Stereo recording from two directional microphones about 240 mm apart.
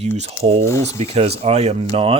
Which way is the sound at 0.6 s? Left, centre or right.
Centre.